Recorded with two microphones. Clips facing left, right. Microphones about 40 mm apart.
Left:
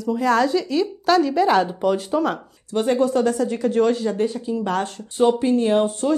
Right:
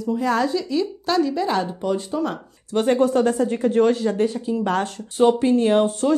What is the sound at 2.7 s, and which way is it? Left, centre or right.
Speech, right.